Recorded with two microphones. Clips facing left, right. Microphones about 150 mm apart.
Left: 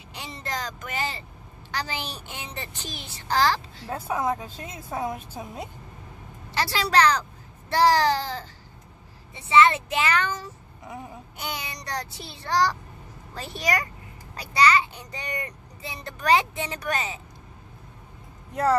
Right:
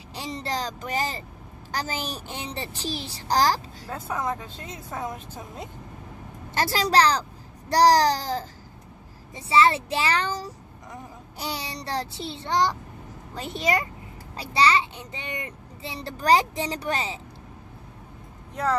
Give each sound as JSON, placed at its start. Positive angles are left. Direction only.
{"t": 0.1, "sound": "a child's voice", "side_deg": -35}
{"t": 3.8, "sound": "a woman's voice", "side_deg": 10}
{"t": 6.5, "sound": "a child's voice", "side_deg": -45}
{"t": 18.5, "sound": "speech", "side_deg": 5}